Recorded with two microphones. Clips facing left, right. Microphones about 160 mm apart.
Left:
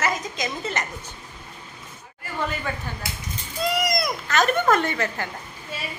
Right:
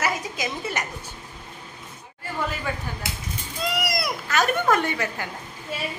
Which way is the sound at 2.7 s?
10° right (ahead or behind).